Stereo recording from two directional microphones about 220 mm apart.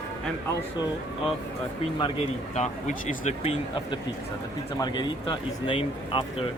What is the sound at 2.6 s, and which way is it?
Speech, 30° left (ahead or behind).